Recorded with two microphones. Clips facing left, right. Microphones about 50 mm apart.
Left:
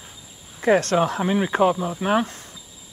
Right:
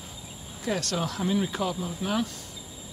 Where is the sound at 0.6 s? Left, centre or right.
Left.